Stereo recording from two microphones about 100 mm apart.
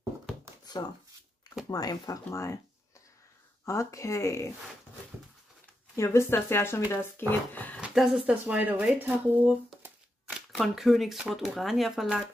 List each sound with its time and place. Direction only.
0.8 s speech: 40° left (ahead or behind)
2.2 s speech: 30° left (ahead or behind)
3.6 s speech: 30° left (ahead or behind)
5.9 s speech: 25° left (ahead or behind)
7.8 s speech: 5° right (ahead or behind)
10.5 s speech: centre (ahead or behind)